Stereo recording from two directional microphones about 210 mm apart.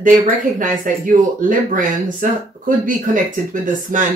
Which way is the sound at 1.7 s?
40° right (ahead or behind).